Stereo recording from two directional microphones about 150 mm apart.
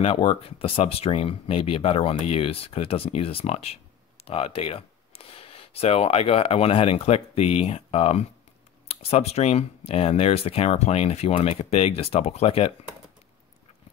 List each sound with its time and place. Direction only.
0.0 s speech: 35° left (ahead or behind)